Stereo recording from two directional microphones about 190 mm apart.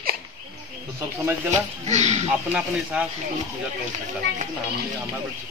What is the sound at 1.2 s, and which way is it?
Speech, 10° right (ahead or behind).